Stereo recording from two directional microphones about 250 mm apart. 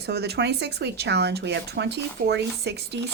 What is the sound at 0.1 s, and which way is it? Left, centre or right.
Speech, right.